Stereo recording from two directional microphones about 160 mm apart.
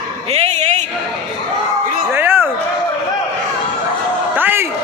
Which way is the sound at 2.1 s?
15° right (ahead or behind).